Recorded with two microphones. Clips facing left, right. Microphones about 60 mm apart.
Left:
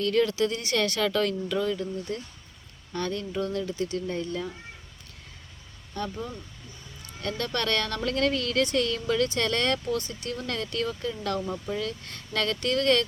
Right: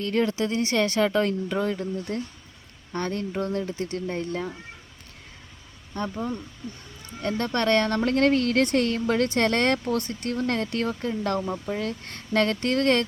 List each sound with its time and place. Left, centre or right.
0.0 s speech: right
5.9 s speech: right